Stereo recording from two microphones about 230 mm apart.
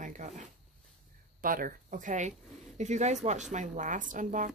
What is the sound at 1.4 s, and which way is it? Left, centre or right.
Speech, right.